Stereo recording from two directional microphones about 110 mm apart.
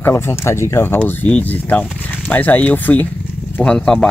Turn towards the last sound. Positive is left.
turn(degrees=5)  # may be behind; listen again after turning